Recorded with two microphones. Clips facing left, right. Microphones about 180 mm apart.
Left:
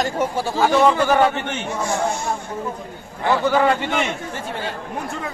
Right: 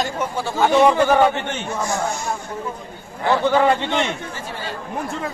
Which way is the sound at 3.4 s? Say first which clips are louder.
Right 1 dB; 5° left (ahead or behind).